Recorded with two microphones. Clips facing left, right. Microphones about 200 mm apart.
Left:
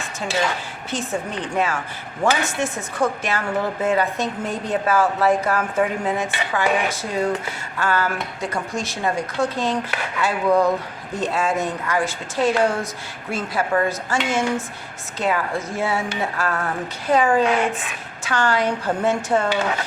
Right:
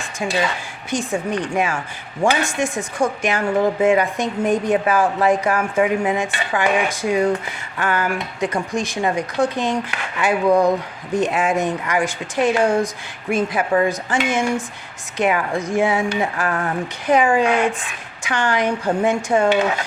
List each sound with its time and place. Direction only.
0.9 s speech: 15° right (ahead or behind)